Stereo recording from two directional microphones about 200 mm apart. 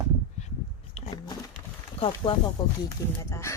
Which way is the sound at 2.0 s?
25° left (ahead or behind).